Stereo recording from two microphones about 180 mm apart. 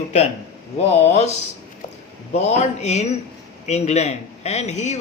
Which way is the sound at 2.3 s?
40° left (ahead or behind).